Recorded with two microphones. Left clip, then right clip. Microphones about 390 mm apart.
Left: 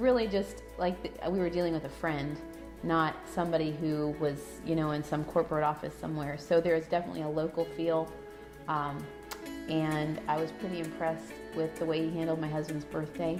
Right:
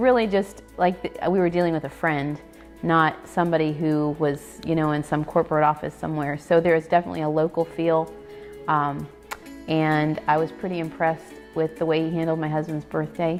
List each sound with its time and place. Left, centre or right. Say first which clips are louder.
0.0 s a woman's voice: right 8 dB; right